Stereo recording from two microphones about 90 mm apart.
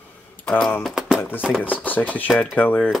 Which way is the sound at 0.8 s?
5° right (ahead or behind).